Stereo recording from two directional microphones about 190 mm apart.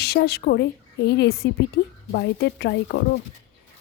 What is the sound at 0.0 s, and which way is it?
Speech, 55° left (ahead or behind).